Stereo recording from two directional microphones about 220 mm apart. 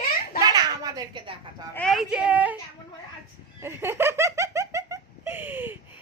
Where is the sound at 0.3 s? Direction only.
15° right (ahead or behind).